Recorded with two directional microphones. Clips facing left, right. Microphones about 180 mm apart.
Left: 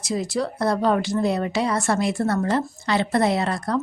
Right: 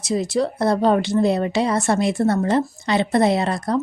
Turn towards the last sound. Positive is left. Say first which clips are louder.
# right 3 dB
turn(degrees=-20)  # may be behind; listen again after turning